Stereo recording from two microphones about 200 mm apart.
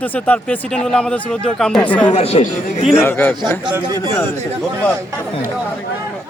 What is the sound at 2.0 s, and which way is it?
Speech, 30° left (ahead or behind).